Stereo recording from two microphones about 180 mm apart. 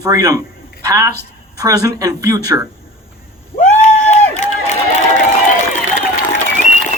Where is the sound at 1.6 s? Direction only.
20° right (ahead or behind).